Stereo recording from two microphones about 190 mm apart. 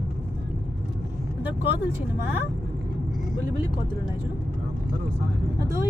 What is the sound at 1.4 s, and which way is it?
Speech, 10° right (ahead or behind).